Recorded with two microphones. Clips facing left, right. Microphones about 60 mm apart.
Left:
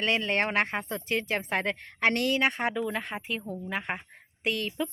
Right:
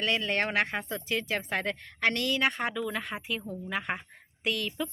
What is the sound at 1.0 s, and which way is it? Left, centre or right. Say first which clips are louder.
Speech: left 2 dB; left.